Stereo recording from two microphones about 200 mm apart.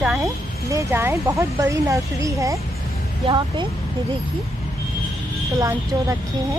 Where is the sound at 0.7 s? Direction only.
15° right (ahead or behind).